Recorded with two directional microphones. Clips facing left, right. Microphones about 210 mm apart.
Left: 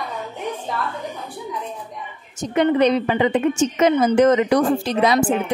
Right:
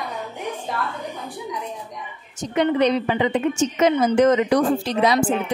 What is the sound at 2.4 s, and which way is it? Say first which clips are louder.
A woman's voice: left 2 dB; 50° left (ahead or behind).